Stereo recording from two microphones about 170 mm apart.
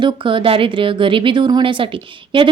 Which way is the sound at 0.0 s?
30° right (ahead or behind).